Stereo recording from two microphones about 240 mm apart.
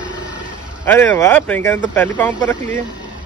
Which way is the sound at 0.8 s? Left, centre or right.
Centre.